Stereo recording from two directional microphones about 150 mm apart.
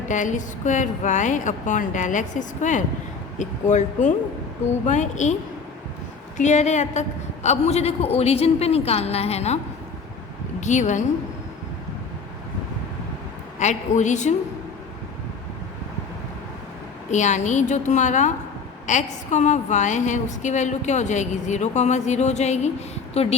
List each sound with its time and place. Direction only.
0.1 s a woman's voice: 55° left (ahead or behind)
6.3 s a woman's voice: 50° left (ahead or behind)
10.6 s a woman's voice: 50° left (ahead or behind)
13.6 s a woman's voice: 50° left (ahead or behind)
17.1 s a woman's voice: 50° left (ahead or behind)